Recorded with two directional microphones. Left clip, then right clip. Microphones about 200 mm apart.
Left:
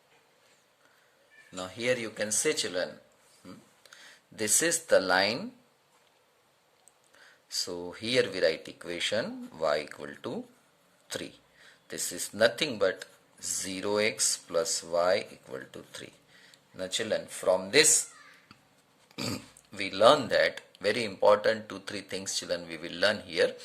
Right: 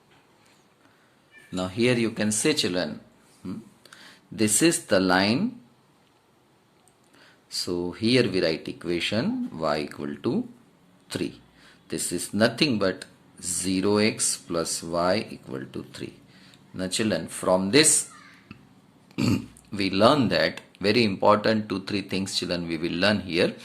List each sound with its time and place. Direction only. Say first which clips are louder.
1.5 s speech: right 6 dB; 5° left (ahead or behind)
7.2 s speech: right 2 dB; 15° left (ahead or behind)
19.1 s speech: right 9 dB; 15° left (ahead or behind)